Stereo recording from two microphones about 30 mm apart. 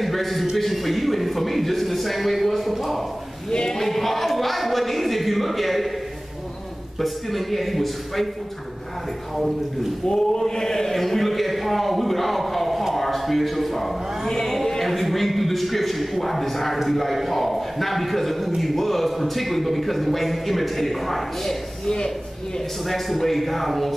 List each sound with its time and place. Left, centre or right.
0.0 s a sound: centre
0.6 s a man's voice: centre
3.4 s speech: centre
3.8 s a sound: centre
4.3 s a man's voice: centre
7.0 s a man's voice: centre
10.0 s a man's voice: left; by 12.8 s centre
12.9 s a sound: centre
14.3 s a man's voice: centre
21.8 s speech: left
22.8 s a man's voice: centre